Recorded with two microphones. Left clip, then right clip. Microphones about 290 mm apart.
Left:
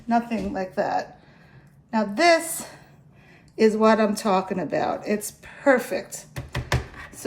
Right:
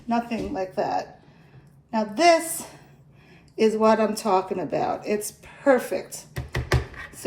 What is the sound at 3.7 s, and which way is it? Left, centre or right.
A woman's voice, left.